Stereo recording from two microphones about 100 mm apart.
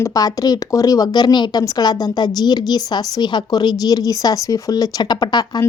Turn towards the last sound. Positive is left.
turn(degrees=45)  # may be behind; listen again after turning